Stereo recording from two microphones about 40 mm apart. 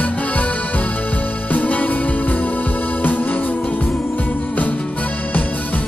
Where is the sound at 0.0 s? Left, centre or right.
Left.